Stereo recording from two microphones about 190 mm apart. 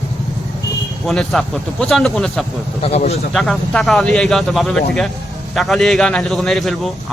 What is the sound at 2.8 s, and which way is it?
Speech, 35° left (ahead or behind).